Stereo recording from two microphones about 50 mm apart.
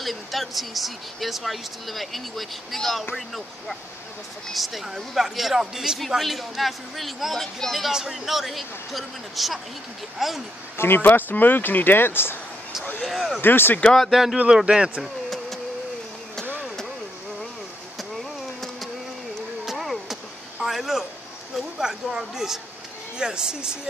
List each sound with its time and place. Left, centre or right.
0.0 s speech: centre
7.9 s speech: centre
10.8 s speech: left
13.0 s speech: centre
13.4 s speech: left
13.8 s speech: centre
14.1 s a woman's voice: centre
14.4 s a woman's voice: centre
15.0 s a sound: centre
18.1 s a sound: centre
21.5 s a woman's voice: centre